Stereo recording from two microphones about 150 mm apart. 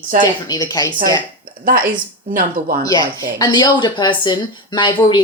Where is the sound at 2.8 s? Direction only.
20° left (ahead or behind).